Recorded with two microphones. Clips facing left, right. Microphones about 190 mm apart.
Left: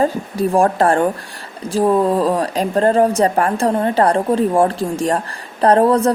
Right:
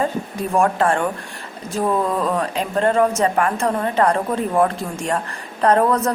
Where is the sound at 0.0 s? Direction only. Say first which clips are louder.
Left 5 dB; 35° left (ahead or behind).